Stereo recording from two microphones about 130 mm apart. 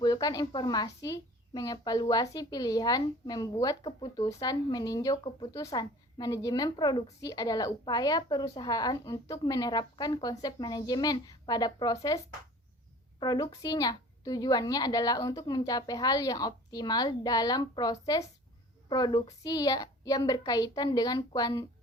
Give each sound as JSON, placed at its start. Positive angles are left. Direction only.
{"t": 0.0, "sound": "speech", "side_deg": 30}